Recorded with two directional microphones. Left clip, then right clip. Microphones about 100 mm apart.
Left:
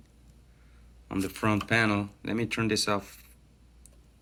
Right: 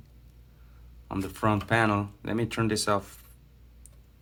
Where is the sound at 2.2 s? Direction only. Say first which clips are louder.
Right 1 dB; 15° right (ahead or behind).